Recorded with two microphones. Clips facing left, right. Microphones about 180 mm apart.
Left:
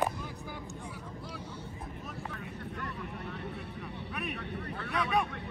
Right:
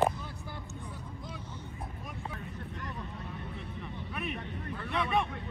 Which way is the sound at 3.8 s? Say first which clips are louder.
Right 2 dB; centre (ahead or behind).